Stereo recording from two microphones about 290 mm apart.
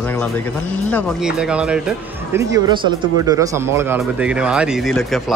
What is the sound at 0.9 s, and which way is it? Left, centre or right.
Speech, centre.